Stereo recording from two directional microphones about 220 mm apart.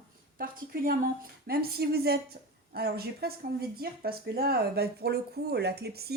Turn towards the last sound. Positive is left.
turn(degrees=-45)  # may be behind; listen again after turning